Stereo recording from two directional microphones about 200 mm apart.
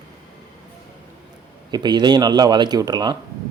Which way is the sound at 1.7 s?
20° right (ahead or behind).